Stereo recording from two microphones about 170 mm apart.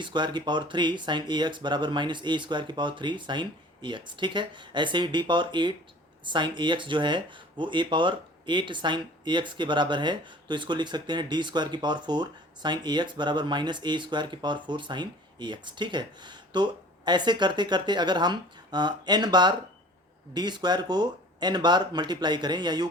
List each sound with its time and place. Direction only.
0.0 s speech: 25° right (ahead or behind)